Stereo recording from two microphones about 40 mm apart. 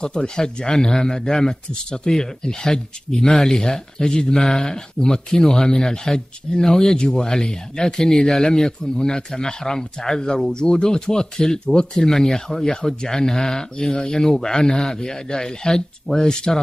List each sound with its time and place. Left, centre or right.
0.0 s speech: centre